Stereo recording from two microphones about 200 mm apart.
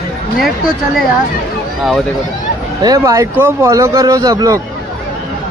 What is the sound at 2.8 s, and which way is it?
A man's voice, 15° right (ahead or behind).